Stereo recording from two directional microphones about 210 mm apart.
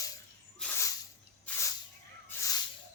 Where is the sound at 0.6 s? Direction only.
10° left (ahead or behind).